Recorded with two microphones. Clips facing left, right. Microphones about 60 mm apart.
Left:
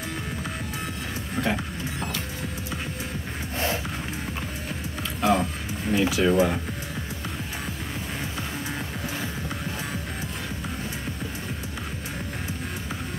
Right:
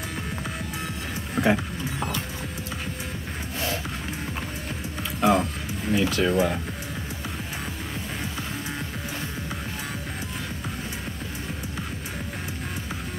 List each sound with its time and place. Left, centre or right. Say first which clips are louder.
1.4 s speech: right 5 dB; centre
3.5 s music: left 2 dB; left
5.2 s music: right 1 dB; centre
7.6 s music: even; centre